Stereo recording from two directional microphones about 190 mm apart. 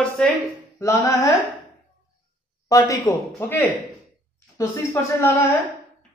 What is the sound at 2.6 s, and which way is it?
A woman's voice, 15° left (ahead or behind).